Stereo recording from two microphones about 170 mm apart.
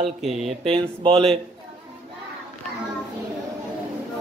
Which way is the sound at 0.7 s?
35° right (ahead or behind).